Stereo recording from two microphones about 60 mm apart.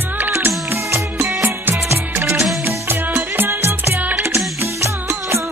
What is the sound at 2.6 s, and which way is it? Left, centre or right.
Music, right.